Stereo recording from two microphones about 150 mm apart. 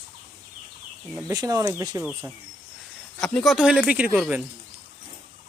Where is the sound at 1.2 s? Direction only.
25° right (ahead or behind).